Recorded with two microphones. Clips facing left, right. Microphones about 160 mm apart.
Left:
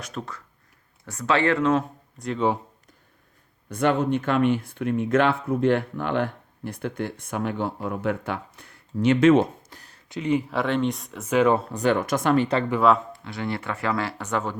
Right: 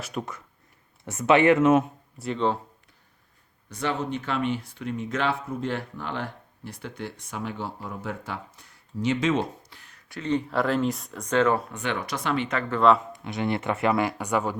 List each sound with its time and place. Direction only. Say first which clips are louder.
0.0 s speech: right 2 dB; 10° right (ahead or behind)
1.0 s speech: right 4 dB; 20° right (ahead or behind)
2.1 s speech: left 1 dB; 5° right (ahead or behind)
3.7 s speech: left 7 dB; 55° left (ahead or behind)
10.1 s speech: left 3 dB; 15° left (ahead or behind)
11.7 s speech: left 8 dB; 40° left (ahead or behind)
13.1 s speech: right 2 dB; 20° right (ahead or behind)